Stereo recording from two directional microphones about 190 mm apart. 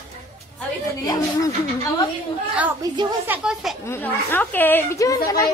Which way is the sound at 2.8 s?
20° right (ahead or behind).